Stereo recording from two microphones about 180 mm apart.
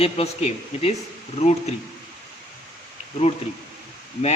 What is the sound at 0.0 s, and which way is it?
Speech, 35° left (ahead or behind).